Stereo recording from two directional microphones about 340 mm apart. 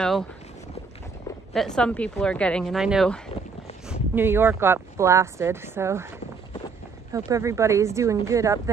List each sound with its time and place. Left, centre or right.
1.5 s a woman's voice: centre